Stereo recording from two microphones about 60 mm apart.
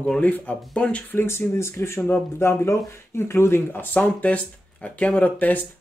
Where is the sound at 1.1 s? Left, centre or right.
Left.